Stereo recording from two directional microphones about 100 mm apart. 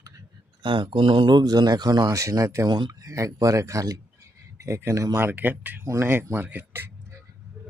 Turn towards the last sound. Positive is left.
turn(degrees=-20)  # may be behind; listen again after turning